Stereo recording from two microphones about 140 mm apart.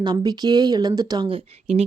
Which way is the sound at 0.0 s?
30° right (ahead or behind).